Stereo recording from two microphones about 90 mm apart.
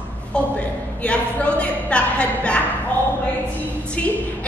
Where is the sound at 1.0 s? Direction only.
15° left (ahead or behind).